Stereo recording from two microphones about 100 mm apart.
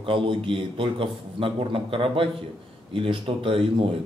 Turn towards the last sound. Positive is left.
turn(degrees=-60)  # may be behind; listen again after turning